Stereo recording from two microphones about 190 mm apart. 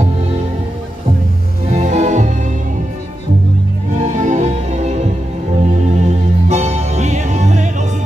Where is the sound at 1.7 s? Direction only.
35° right (ahead or behind).